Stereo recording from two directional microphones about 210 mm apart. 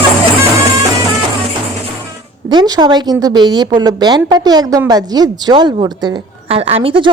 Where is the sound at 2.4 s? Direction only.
20° right (ahead or behind).